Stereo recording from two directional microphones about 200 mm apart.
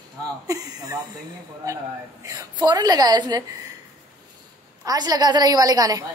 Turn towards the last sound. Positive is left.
turn(degrees=-20)  # may be behind; listen again after turning